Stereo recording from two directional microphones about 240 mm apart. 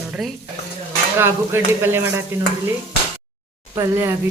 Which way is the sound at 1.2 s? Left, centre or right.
Centre.